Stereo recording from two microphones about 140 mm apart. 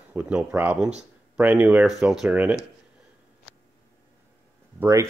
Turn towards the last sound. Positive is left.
turn(degrees=-20)  # may be behind; listen again after turning